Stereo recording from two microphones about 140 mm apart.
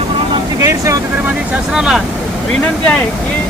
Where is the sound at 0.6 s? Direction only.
20° right (ahead or behind).